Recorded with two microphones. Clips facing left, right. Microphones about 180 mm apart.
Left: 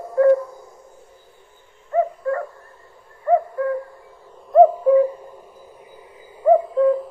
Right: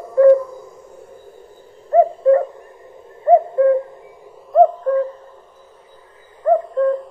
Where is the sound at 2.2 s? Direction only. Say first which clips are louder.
Right 11 dB; 20° right (ahead or behind).